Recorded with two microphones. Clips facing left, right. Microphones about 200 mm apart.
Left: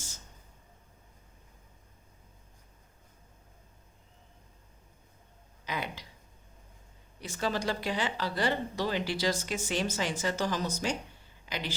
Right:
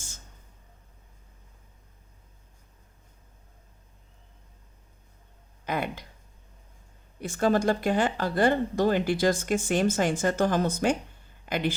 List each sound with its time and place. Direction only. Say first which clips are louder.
5.6 s speech: right 6 dB; 55° right (ahead or behind)
7.2 s speech: right 9 dB; 50° right (ahead or behind)